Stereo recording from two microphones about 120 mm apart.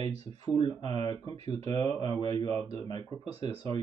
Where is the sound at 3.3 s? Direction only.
55° right (ahead or behind).